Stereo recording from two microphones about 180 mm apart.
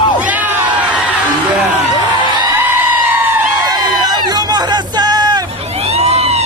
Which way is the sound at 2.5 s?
10° right (ahead or behind).